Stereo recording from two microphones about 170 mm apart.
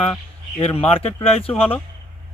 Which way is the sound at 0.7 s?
35° left (ahead or behind).